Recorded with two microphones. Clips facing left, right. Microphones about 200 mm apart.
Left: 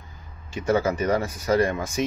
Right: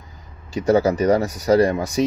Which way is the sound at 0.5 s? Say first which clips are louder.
Right 6 dB; 40° right (ahead or behind).